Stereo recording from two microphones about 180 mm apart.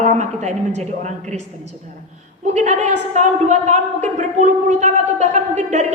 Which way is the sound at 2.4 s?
40° right (ahead or behind).